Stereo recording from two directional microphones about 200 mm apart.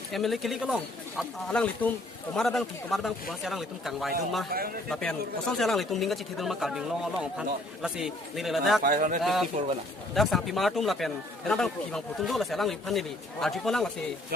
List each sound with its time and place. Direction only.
0.1 s a man's voice: centre (ahead or behind)
8.8 s a man's voice: 40° right (ahead or behind)
9.2 s a man's voice: centre (ahead or behind)